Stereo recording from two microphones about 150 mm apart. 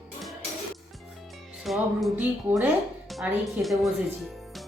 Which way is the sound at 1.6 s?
Centre (ahead or behind).